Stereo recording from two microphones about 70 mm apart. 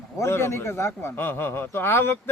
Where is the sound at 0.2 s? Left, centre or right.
Left.